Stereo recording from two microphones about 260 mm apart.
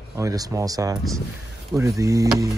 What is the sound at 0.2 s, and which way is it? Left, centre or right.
Speech, centre.